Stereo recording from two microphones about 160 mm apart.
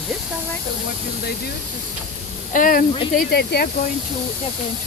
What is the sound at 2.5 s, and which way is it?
Speech, 60° left (ahead or behind).